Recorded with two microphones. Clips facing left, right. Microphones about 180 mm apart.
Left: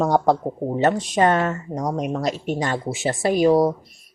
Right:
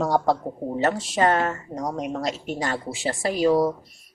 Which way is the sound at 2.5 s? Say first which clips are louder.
Left 3 dB; 25° left (ahead or behind).